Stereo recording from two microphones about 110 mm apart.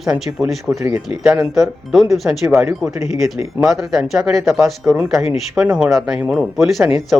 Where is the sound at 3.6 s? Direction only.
Centre (ahead or behind).